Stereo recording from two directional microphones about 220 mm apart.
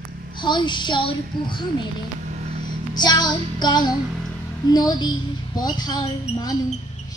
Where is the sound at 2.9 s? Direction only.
20° left (ahead or behind).